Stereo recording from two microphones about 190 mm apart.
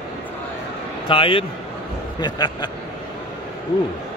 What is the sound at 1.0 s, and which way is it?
A man's voice, 30° left (ahead or behind).